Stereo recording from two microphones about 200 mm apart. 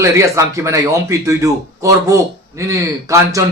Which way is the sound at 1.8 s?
15° right (ahead or behind).